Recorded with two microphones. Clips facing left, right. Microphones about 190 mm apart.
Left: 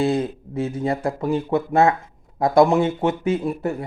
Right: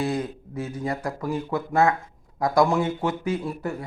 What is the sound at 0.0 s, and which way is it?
A man's voice, 25° left (ahead or behind).